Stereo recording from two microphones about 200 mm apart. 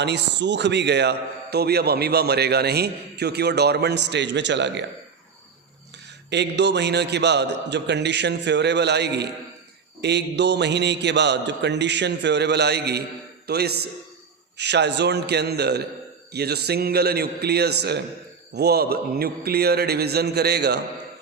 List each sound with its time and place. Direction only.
0.0 s a man's voice: 60° right (ahead or behind)
6.3 s a man's voice: 60° right (ahead or behind)